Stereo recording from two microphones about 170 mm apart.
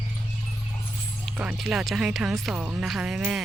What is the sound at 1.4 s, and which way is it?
Speech, 5° right (ahead or behind).